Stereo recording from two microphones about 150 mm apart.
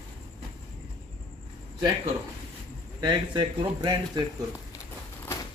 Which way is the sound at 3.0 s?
30° right (ahead or behind).